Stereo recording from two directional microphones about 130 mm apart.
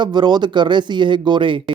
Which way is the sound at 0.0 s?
35° right (ahead or behind).